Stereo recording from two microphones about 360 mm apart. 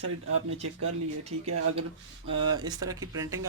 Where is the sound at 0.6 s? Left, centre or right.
Right.